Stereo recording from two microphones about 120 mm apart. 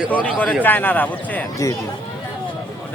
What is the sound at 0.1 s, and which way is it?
Speech, 10° left (ahead or behind).